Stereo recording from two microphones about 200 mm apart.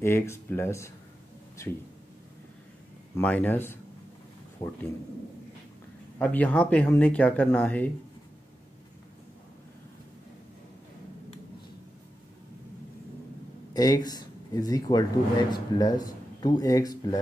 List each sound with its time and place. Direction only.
0.0 s speech: 10° left (ahead or behind)
3.2 s speech: 10° left (ahead or behind)
6.1 s speech: 10° left (ahead or behind)
13.7 s speech: 20° left (ahead or behind)